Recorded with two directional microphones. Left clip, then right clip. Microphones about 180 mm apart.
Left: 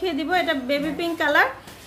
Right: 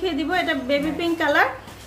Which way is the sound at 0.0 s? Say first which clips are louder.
Even; 20° left (ahead or behind).